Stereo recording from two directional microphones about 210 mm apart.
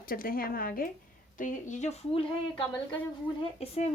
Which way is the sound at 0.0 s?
40° left (ahead or behind).